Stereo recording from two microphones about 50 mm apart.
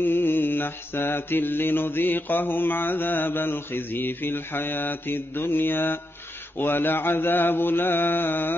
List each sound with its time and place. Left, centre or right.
0.0 s mantra: left